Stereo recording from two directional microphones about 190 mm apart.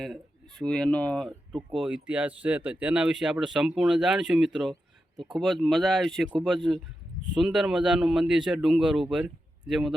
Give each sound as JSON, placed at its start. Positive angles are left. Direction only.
{"t": 0.0, "sound": "speech", "side_deg": 0}
{"t": 4.7, "sound": "a sound", "side_deg": -20}
{"t": 5.3, "sound": "speech", "side_deg": 0}
{"t": 7.4, "sound": "speech", "side_deg": -5}